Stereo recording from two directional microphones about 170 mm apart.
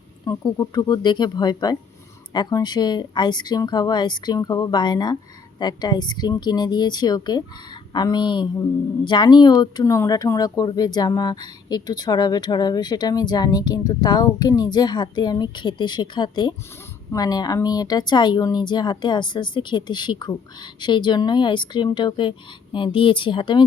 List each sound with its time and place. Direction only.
0.3 s speech: 20° left (ahead or behind)